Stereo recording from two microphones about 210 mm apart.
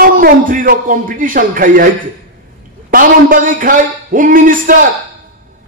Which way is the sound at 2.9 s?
40° right (ahead or behind).